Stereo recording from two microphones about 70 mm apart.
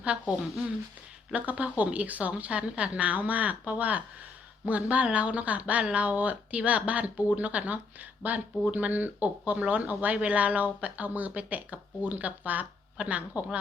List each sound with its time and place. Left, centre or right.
0.0 s speech: centre